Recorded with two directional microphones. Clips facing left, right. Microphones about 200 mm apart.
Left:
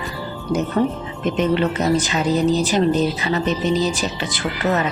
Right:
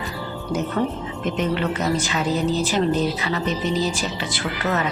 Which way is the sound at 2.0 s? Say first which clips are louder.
Left 4 dB; 20° left (ahead or behind).